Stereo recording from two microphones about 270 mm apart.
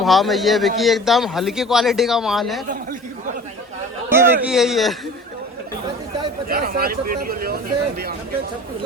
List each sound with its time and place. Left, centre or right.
0.0 s a man's voice: centre
4.1 s a man's voice: centre
6.5 s speech: right